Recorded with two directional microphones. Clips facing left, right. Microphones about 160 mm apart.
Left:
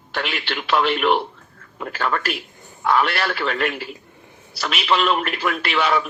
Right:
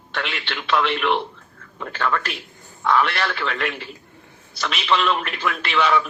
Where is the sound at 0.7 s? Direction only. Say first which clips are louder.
Left 2 dB; 40° left (ahead or behind).